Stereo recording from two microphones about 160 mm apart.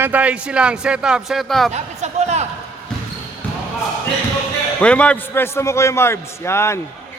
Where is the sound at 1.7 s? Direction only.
45° right (ahead or behind).